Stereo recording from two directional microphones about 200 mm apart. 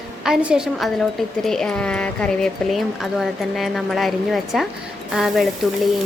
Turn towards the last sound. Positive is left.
turn(degrees=0)  # may be behind; listen again after turning